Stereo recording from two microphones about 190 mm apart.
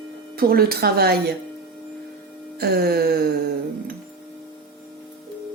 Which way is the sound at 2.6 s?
55° right (ahead or behind).